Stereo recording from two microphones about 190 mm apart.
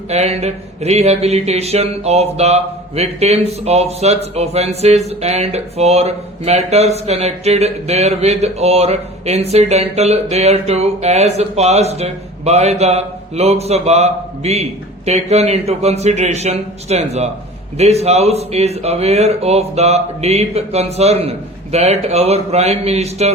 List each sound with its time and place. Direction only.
0.1 s speech: 35° right (ahead or behind)